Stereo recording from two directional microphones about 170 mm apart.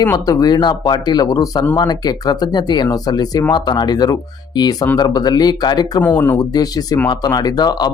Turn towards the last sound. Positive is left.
turn(degrees=25)  # may be behind; listen again after turning